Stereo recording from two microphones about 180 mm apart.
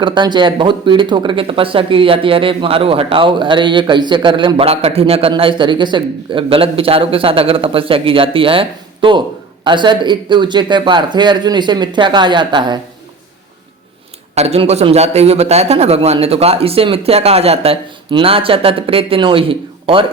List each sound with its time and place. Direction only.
0.0 s speech: 25° right (ahead or behind)
14.3 s a man's voice: 35° right (ahead or behind)